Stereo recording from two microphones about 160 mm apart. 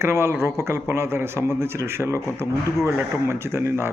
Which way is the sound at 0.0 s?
15° right (ahead or behind).